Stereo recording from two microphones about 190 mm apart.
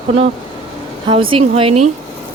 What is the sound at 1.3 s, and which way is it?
Speech, 30° right (ahead or behind).